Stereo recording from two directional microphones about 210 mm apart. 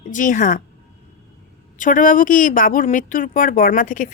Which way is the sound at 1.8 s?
40° left (ahead or behind).